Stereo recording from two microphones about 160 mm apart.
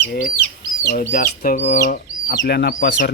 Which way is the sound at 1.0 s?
50° left (ahead or behind).